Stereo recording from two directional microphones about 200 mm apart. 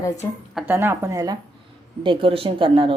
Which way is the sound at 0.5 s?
10° right (ahead or behind).